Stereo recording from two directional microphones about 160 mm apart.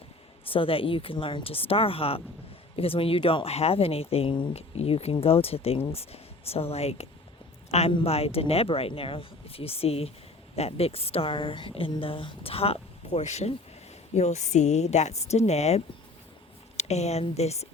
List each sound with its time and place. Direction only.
0.4 s a woman's voice: 35° left (ahead or behind)